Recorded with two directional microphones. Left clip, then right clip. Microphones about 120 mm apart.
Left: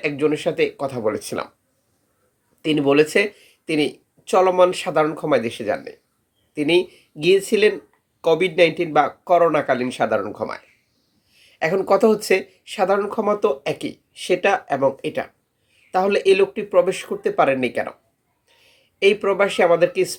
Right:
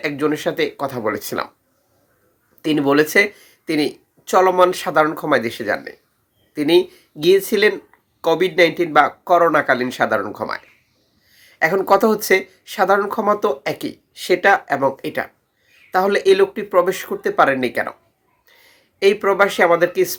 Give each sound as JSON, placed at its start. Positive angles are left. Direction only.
{"t": 0.0, "sound": "speech", "side_deg": 15}
{"t": 2.6, "sound": "speech", "side_deg": 15}